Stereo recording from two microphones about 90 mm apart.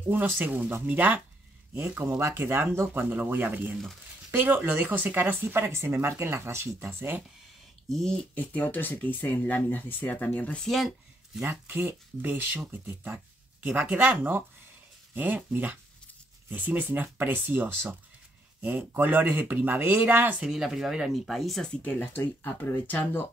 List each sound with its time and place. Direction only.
0.1 s speech: 20° right (ahead or behind)
8.4 s speech: 20° left (ahead or behind); by 10.9 s 5° left (ahead or behind)
11.6 s speech: 25° right (ahead or behind)
20.4 s speech: 5° right (ahead or behind)
21.8 s speech: 20° left (ahead or behind)